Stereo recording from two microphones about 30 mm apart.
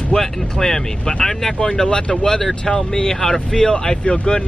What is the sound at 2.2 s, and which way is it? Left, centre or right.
Speech, centre.